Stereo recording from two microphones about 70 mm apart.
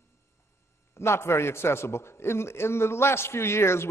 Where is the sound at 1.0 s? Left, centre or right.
Left.